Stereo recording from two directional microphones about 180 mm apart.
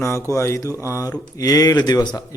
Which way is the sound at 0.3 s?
15° left (ahead or behind).